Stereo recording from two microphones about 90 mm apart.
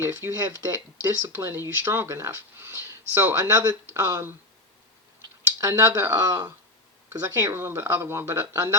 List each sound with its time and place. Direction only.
0.0 s speech: 30° right (ahead or behind)
0.3 s speech: 40° right (ahead or behind)
5.5 s speech: 40° right (ahead or behind)